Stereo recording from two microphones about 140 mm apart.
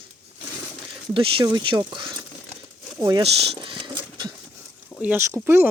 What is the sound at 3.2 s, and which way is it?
Speech, 40° right (ahead or behind).